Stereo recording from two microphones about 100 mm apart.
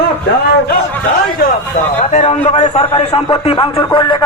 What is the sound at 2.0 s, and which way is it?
A man's voice, 90° left.